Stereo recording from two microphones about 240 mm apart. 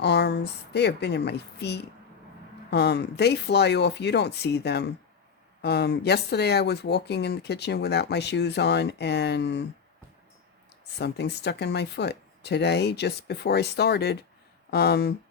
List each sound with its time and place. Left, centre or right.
0.0 s speech: left
10.9 s speech: left